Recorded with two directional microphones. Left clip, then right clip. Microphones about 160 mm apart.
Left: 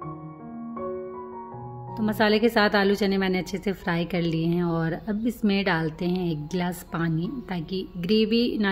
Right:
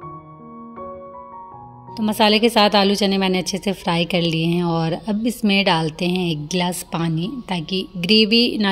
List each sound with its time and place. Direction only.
2.0 s a woman's voice: 15° right (ahead or behind)